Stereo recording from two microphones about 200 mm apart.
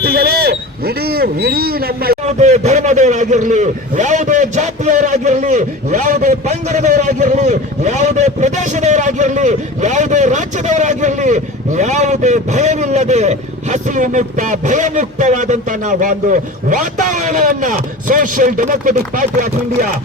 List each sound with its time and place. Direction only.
0.0 s speech: 50° right (ahead or behind)
2.2 s a man's voice: 35° right (ahead or behind)